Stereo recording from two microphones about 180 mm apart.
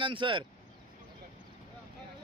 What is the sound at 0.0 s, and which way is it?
Speech, 25° right (ahead or behind).